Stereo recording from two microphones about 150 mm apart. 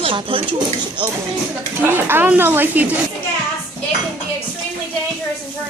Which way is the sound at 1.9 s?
15° right (ahead or behind).